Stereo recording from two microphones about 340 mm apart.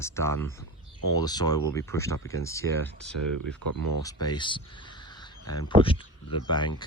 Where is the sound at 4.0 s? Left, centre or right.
Centre.